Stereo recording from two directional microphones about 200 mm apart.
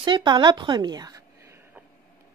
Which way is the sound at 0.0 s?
25° right (ahead or behind).